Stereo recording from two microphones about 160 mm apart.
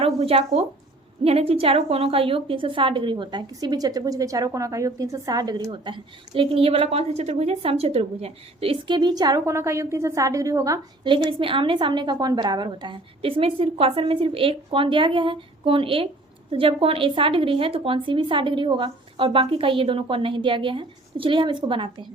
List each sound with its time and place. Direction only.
0.0 s a woman's voice: 40° right (ahead or behind)